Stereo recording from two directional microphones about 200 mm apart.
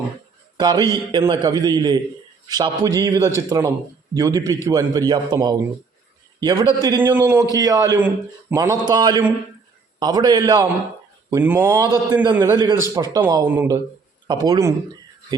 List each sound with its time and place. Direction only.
0.5 s a man's voice: 20° right (ahead or behind)